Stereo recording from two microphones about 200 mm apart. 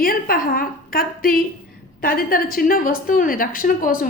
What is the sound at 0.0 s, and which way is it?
A woman's voice, 45° left (ahead or behind).